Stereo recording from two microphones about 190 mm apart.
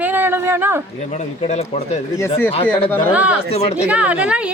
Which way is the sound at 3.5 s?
30° left (ahead or behind).